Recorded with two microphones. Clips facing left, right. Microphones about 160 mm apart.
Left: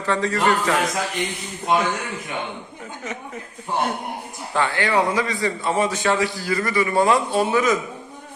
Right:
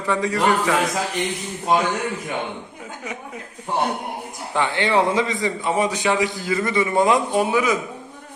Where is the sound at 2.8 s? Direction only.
10° right (ahead or behind).